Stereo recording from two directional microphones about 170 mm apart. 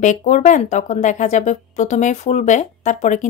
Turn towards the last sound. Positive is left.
turn(degrees=45)  # may be behind; listen again after turning